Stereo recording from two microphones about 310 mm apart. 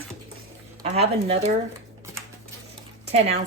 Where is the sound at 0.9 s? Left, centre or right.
Centre.